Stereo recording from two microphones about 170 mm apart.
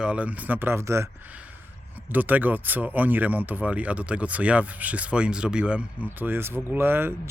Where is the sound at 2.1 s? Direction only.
10° right (ahead or behind).